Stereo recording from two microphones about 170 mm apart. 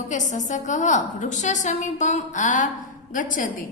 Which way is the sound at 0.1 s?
45° left (ahead or behind).